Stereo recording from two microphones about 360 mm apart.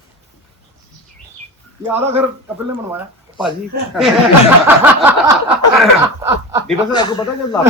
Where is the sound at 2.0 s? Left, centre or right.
Centre.